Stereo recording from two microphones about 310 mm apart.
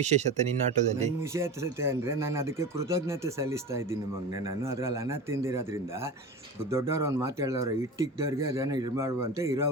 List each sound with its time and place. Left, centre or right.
0.0 s speech: right
1.3 s speech: centre